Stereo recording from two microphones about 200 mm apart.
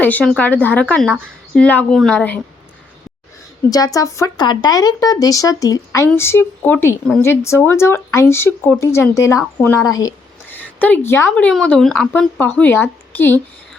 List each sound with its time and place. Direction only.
0.0 s a woman's voice: 10° left (ahead or behind)
3.7 s a woman's voice: 15° left (ahead or behind)